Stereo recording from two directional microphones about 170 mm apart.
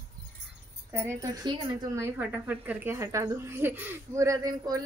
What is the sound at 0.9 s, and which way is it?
Speech, 15° right (ahead or behind).